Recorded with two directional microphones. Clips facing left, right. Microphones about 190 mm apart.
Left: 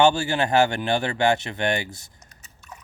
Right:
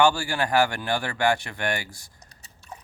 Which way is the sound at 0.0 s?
25° left (ahead or behind).